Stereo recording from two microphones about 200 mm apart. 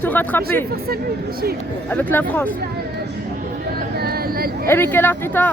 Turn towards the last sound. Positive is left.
turn(degrees=10)  # may be behind; listen again after turning